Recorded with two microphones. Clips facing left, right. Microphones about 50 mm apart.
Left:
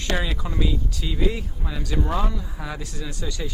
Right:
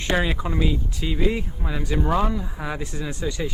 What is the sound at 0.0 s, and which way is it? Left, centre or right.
A man's voice, right.